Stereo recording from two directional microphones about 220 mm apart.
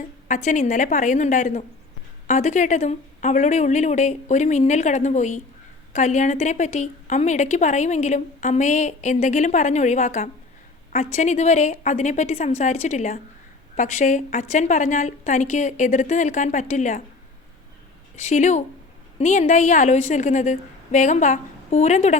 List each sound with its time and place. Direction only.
0.3 s a woman's voice: 35° left (ahead or behind)
18.2 s a woman's voice: 30° left (ahead or behind)